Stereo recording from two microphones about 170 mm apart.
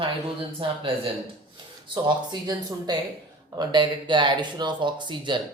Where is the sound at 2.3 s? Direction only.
25° right (ahead or behind).